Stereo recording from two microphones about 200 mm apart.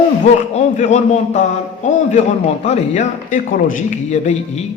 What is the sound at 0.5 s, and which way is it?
Speech, 35° left (ahead or behind).